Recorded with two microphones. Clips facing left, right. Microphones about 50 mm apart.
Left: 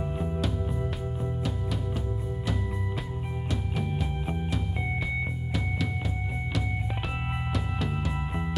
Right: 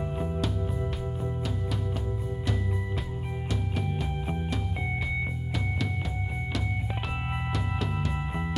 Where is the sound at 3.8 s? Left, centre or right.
Centre.